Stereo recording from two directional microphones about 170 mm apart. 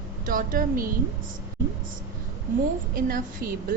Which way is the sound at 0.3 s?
55° right (ahead or behind).